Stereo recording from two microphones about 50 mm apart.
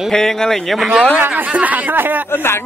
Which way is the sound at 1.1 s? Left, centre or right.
Right.